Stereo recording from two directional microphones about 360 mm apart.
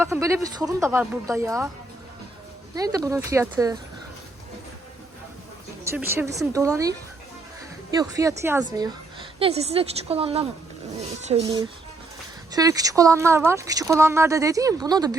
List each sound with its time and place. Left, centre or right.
0.0 s speech: centre
2.7 s speech: centre
5.8 s speech: centre